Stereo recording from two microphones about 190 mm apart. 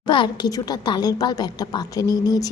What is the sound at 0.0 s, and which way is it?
A woman's voice, 25° left (ahead or behind).